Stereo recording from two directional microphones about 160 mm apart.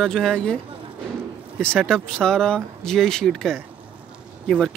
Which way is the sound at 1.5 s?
5° left (ahead or behind).